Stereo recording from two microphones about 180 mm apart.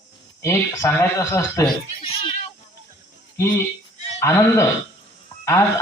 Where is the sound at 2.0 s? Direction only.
30° left (ahead or behind).